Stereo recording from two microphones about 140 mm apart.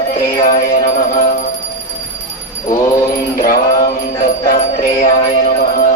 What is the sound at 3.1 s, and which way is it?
Mantra, 90° left.